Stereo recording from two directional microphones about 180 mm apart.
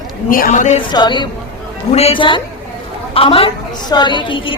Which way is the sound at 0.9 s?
25° left (ahead or behind).